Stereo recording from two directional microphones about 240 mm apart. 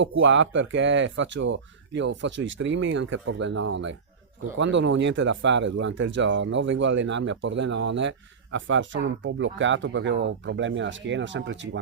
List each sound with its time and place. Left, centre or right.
0.0 s speech: right